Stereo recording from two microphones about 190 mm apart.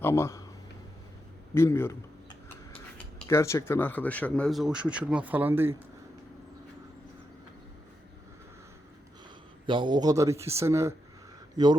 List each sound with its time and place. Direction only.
0.0 s speech: 15° left (ahead or behind)
1.5 s a man's voice: 15° left (ahead or behind)
3.2 s speech: 15° left (ahead or behind); by 5.7 s 10° right (ahead or behind)
9.6 s a man's voice: 25° right (ahead or behind)